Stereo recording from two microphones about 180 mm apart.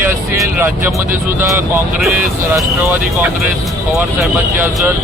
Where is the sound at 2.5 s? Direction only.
10° right (ahead or behind).